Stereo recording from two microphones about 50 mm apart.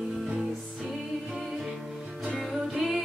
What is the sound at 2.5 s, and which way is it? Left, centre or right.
Music, centre.